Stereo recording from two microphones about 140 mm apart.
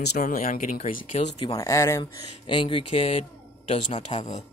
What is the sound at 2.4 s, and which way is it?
Speech, 35° left (ahead or behind).